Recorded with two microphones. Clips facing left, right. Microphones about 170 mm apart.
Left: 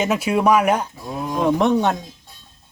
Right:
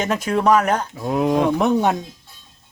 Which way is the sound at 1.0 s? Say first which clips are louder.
Right 6 dB; 75° right (ahead or behind).